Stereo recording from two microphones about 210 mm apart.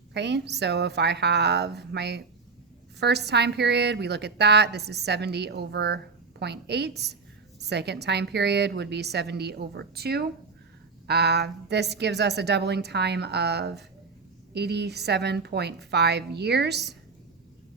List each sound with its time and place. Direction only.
0.1 s a woman's voice: 55° right (ahead or behind)